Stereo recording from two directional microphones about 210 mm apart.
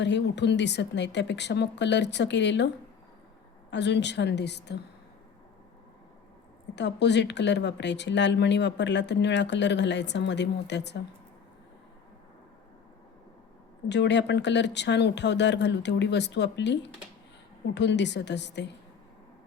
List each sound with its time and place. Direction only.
0.0 s speech: 55° left (ahead or behind)
3.7 s speech: 55° left (ahead or behind)
6.7 s speech: 55° left (ahead or behind)
13.8 s speech: 55° left (ahead or behind)